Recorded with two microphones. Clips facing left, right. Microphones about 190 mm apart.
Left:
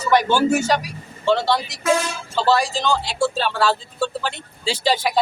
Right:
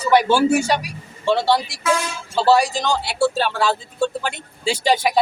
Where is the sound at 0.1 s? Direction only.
10° right (ahead or behind).